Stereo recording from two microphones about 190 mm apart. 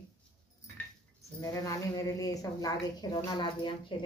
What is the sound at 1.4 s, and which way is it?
A woman's voice, 20° left (ahead or behind).